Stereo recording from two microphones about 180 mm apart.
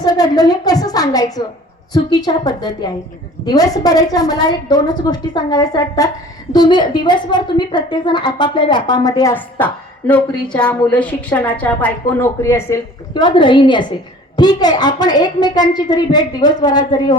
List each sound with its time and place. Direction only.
0.0 s a woman's voice: 20° left (ahead or behind)
9.3 s a woman's voice: 10° left (ahead or behind)